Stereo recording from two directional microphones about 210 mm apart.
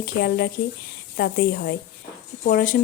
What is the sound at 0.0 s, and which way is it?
Speech, 45° left (ahead or behind).